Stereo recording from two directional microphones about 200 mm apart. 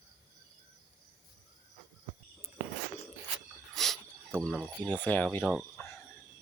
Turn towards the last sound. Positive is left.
turn(degrees=5)  # may be behind; listen again after turning